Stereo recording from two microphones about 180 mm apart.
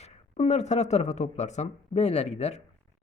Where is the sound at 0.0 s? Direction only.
35° left (ahead or behind).